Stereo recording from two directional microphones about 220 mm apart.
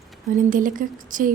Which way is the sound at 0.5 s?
40° right (ahead or behind).